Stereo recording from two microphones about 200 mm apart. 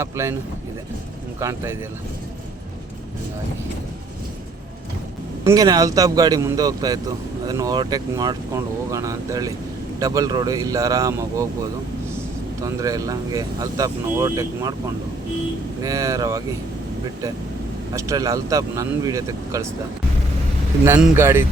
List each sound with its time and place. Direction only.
0.0 s speech: 15° right (ahead or behind)
1.4 s speech: 15° right (ahead or behind)
5.5 s speech: 20° right (ahead or behind)
12.8 s speech: 15° right (ahead or behind)
15.8 s speech: 15° right (ahead or behind)
17.9 s speech: 15° right (ahead or behind)
20.8 s speech: 10° right (ahead or behind)